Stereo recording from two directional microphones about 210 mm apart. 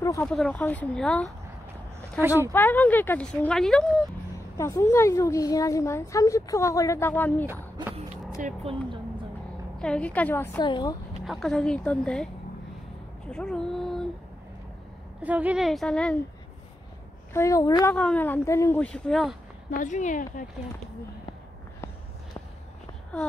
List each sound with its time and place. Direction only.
0.0 s a woman's voice: 15° left (ahead or behind)
2.5 s a woman's voice: 10° left (ahead or behind)
4.6 s a woman's voice: 15° left (ahead or behind)
8.4 s speech: 35° right (ahead or behind)
9.8 s a woman's voice: 5° left (ahead or behind); by 11.0 s 20° left (ahead or behind)
11.2 s a woman's voice: centre (ahead or behind)
13.3 s a woman's voice: 5° left (ahead or behind)
15.2 s a woman's voice: 5° right (ahead or behind)
17.3 s a woman's voice: 15° left (ahead or behind)
19.8 s speech: 35° left (ahead or behind)